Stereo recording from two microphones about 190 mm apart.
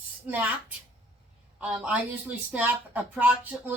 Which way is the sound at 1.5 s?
5° right (ahead or behind).